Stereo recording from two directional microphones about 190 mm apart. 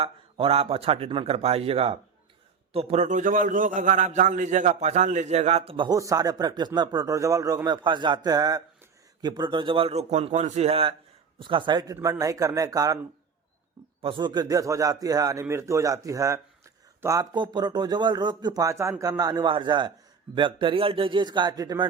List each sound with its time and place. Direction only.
0.0 s a man's voice: 30° right (ahead or behind)
14.0 s a man's voice: 25° right (ahead or behind)